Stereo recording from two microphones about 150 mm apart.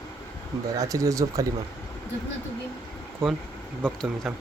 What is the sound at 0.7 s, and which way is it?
Speech, 20° right (ahead or behind).